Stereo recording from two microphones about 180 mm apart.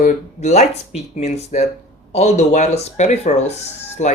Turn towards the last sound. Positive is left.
turn(degrees=40)  # may be behind; listen again after turning